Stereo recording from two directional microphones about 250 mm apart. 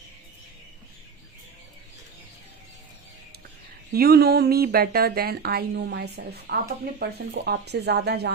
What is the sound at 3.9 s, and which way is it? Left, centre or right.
Speech, right.